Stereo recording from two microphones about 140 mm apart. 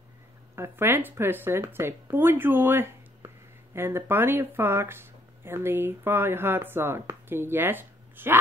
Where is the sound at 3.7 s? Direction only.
15° right (ahead or behind).